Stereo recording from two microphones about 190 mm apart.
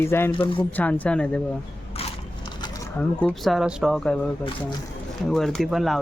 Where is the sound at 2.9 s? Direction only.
5° left (ahead or behind).